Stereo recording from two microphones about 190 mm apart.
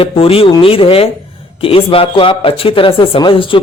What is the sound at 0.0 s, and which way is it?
Speech, 30° left (ahead or behind).